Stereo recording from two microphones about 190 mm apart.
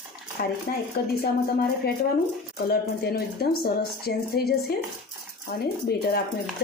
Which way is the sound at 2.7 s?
55° left (ahead or behind).